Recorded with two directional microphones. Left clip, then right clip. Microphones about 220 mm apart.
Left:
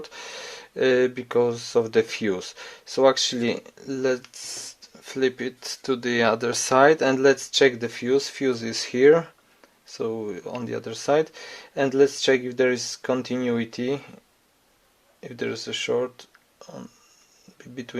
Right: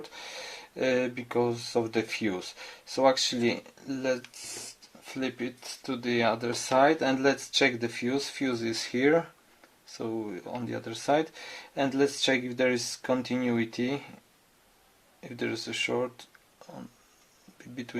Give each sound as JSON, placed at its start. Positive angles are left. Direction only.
{"t": 0.0, "sound": "speech", "side_deg": 35}
{"t": 15.2, "sound": "speech", "side_deg": 35}